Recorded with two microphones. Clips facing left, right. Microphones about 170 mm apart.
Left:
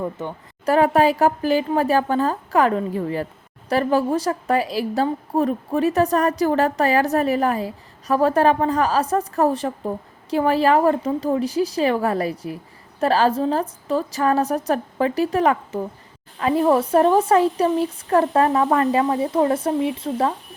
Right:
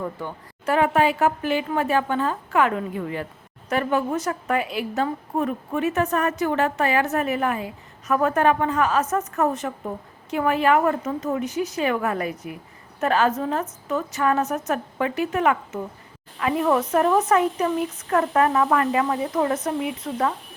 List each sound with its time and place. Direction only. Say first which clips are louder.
0.0 s a woman's voice: left 3 dB; 20° left (ahead or behind)
0.6 s a woman's voice: left 4 dB; 35° left (ahead or behind)